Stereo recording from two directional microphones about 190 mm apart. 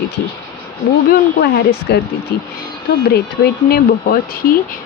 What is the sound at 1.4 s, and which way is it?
Speech, 60° left (ahead or behind).